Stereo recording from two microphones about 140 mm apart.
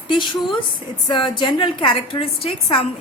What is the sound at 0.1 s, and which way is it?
A woman's voice, 35° left (ahead or behind).